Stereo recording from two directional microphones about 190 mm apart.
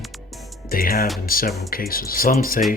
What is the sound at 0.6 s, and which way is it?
Speech, 50° left (ahead or behind).